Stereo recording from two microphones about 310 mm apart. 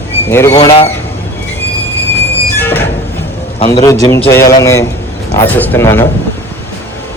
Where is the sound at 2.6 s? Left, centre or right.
Centre.